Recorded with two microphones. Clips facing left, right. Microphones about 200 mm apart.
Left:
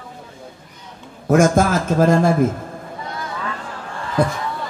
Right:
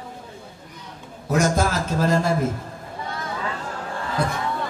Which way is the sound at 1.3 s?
50° left (ahead or behind).